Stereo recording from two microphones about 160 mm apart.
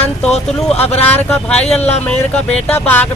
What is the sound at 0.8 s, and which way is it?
Speech, 40° left (ahead or behind).